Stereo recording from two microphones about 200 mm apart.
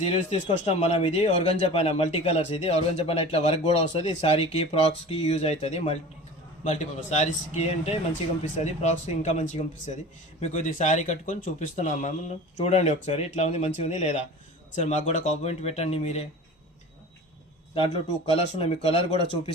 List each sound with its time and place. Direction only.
0.0 s a man's voice: 30° left (ahead or behind)
17.7 s speech: 30° left (ahead or behind)